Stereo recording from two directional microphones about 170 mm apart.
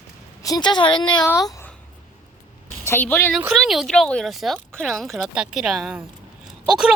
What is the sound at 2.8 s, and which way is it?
Speech, 10° left (ahead or behind).